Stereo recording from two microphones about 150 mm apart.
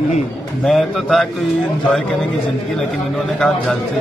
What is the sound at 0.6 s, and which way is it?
Speech, centre (ahead or behind).